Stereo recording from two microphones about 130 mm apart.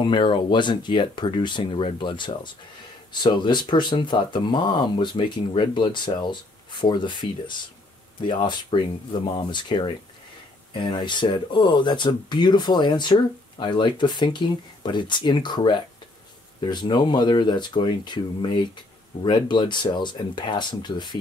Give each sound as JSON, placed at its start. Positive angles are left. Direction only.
{"t": 0.0, "sound": "speech", "side_deg": 40}